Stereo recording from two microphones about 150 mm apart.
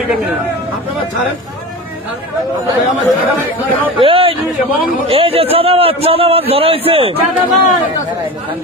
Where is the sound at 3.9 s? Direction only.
35° right (ahead or behind).